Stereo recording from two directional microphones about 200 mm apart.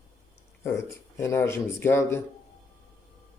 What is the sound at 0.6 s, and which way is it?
Speech, 15° left (ahead or behind).